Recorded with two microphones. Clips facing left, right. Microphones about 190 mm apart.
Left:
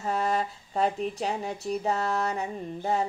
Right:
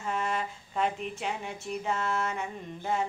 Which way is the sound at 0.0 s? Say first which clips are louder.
Left 4 dB; 35° left (ahead or behind).